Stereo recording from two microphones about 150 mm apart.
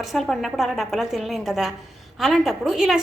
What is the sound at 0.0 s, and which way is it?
A woman's voice, centre (ahead or behind).